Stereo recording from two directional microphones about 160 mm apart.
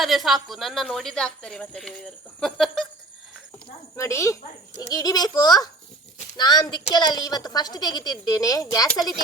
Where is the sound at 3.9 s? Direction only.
20° left (ahead or behind).